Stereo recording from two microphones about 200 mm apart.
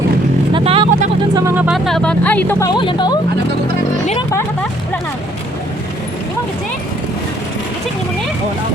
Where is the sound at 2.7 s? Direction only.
25° left (ahead or behind).